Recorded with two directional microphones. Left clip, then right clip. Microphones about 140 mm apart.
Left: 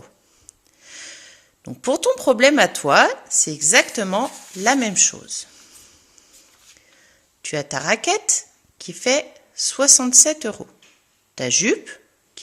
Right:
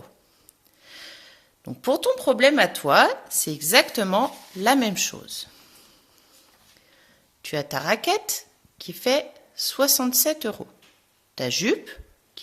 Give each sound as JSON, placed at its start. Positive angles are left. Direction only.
{"t": 0.0, "sound": "a sound", "side_deg": 15}
{"t": 2.8, "sound": "speech", "side_deg": 20}
{"t": 7.4, "sound": "a woman's voice", "side_deg": 20}